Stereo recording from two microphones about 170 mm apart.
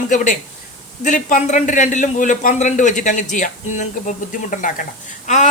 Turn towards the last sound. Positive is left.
turn(degrees=45)  # may be behind; listen again after turning